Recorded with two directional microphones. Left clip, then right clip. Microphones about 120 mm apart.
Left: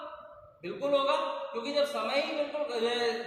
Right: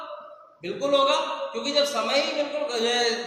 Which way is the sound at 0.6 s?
15° right (ahead or behind).